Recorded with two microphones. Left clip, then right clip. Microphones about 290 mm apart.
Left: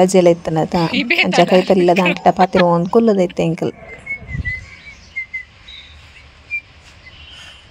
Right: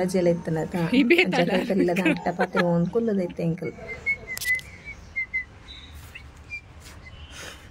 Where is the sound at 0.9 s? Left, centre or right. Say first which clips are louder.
Left 4 dB; centre.